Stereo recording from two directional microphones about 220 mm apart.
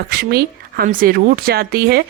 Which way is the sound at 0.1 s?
45° right (ahead or behind).